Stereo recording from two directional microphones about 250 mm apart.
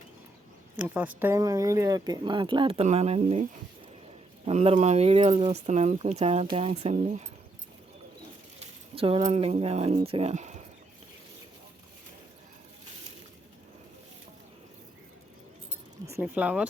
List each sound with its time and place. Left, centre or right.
0.8 s speech: centre; by 3.4 s right
4.4 s speech: right
8.5 s speech: right
16.0 s speech: centre